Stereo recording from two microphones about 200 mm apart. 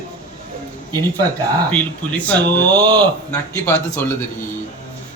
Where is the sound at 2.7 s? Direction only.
20° right (ahead or behind).